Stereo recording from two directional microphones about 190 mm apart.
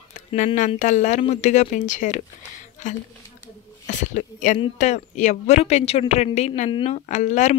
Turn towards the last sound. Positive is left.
turn(degrees=40)  # may be behind; listen again after turning